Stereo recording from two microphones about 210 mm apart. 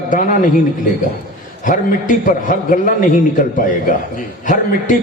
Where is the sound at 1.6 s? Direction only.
40° left (ahead or behind).